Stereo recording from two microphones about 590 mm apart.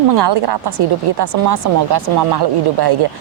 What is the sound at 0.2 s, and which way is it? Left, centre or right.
Speech, right.